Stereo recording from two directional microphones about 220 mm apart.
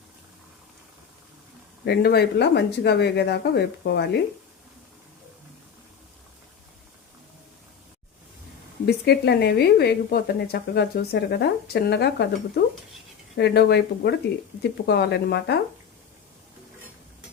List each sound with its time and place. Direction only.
1.8 s a woman's voice: 50° left (ahead or behind)
8.9 s a woman's voice: 50° left (ahead or behind)
13.3 s a woman's voice: 50° left (ahead or behind)